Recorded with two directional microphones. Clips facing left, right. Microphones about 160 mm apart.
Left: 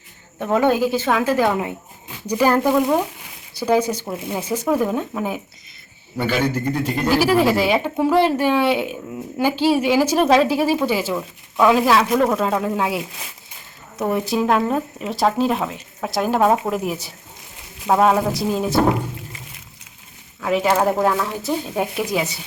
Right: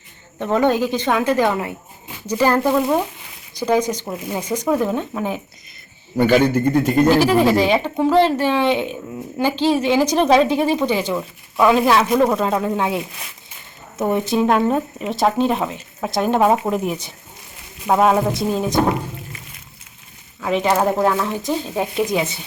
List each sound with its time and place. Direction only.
0.3 s speech: 5° left (ahead or behind)
6.1 s a man's voice: 45° right (ahead or behind)
7.1 s speech: 10° left (ahead or behind)
14.0 s speech: centre (ahead or behind)
20.4 s speech: 5° left (ahead or behind)